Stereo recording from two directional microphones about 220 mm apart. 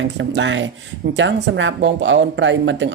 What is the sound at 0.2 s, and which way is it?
A woman's voice, 55° right (ahead or behind).